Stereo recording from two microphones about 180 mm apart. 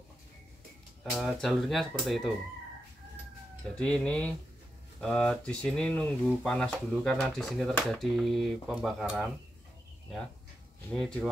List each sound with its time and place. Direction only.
1.1 s speech: centre (ahead or behind)
3.7 s speech: 5° left (ahead or behind)
10.9 s speech: 5° left (ahead or behind)